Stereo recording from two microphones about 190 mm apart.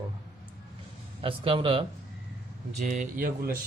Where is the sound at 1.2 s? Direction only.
30° right (ahead or behind).